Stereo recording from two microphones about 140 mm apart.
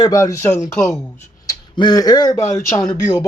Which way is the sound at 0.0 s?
25° left (ahead or behind).